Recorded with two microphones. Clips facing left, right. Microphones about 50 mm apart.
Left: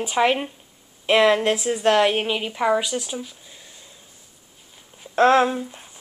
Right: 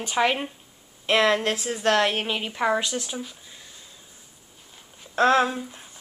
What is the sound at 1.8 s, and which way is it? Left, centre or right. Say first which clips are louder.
A woman's voice: left 3 dB; centre.